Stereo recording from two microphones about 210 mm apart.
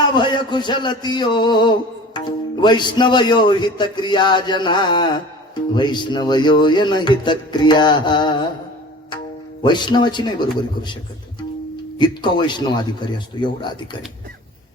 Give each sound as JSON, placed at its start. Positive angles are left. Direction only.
{"t": 0.1, "sound": "a sound", "side_deg": 20}
{"t": 2.1, "sound": "speech", "side_deg": 20}
{"t": 9.6, "sound": "speech", "side_deg": 20}
{"t": 11.9, "sound": "speech", "side_deg": 20}